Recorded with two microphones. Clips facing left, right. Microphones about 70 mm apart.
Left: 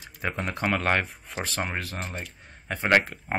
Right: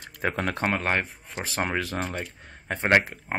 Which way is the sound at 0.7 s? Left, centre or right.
Centre.